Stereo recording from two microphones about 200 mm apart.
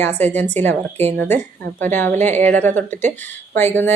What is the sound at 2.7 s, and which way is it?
Speech, 35° right (ahead or behind).